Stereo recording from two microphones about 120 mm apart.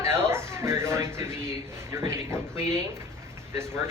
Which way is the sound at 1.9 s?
25° right (ahead or behind).